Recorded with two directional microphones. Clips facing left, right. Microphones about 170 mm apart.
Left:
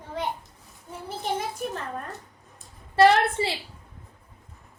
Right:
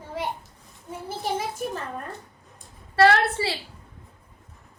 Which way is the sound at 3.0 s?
20° left (ahead or behind).